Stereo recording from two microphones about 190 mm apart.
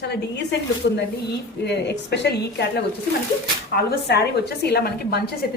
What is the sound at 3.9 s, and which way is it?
A woman's voice, 60° left (ahead or behind).